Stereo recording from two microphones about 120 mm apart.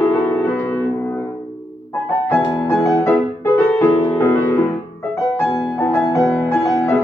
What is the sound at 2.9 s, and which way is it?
Music, 25° left (ahead or behind).